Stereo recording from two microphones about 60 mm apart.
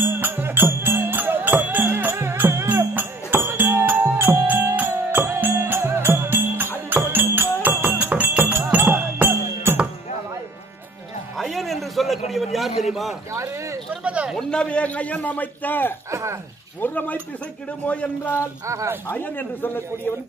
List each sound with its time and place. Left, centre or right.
0.0 s music: right
5.6 s music: right
11.3 s a sound: centre
13.3 s a sound: right
14.0 s a sound: right
14.5 s a man's voice: centre
16.1 s speech: right
16.8 s a man's voice: left
19.0 s speech: left